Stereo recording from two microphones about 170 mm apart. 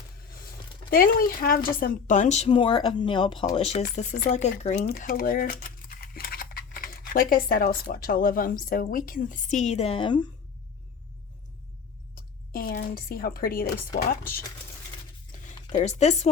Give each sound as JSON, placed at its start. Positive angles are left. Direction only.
{"t": 0.3, "sound": "speech", "side_deg": 60}
{"t": 4.9, "sound": "speech", "side_deg": 60}
{"t": 12.1, "sound": "speech", "side_deg": 55}
{"t": 15.7, "sound": "speech", "side_deg": 40}